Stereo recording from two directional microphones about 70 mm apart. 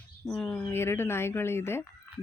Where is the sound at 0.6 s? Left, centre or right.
Left.